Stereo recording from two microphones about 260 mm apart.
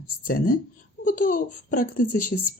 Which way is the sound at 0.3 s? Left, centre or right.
Left.